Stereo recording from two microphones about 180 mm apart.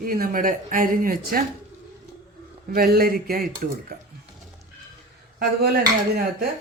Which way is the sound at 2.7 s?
55° right (ahead or behind).